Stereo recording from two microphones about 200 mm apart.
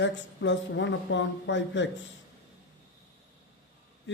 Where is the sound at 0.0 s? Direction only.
65° left (ahead or behind).